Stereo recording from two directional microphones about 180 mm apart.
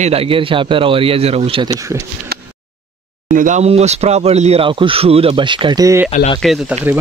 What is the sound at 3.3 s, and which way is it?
Speech, 45° right (ahead or behind).